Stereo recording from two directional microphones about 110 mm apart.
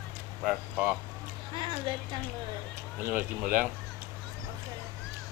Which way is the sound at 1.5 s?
45° right (ahead or behind).